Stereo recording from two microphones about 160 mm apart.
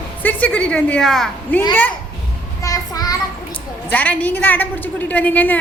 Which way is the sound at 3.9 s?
10° left (ahead or behind).